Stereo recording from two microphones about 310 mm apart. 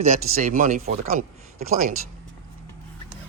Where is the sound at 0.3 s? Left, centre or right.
Right.